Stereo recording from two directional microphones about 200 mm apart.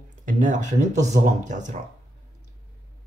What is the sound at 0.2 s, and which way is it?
Speech, 40° right (ahead or behind).